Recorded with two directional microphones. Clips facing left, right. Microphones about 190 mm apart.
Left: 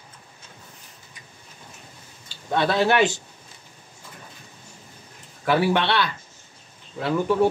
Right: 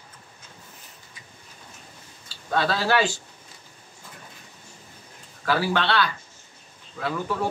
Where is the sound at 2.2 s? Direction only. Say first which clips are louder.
Left 2 dB; 20° left (ahead or behind).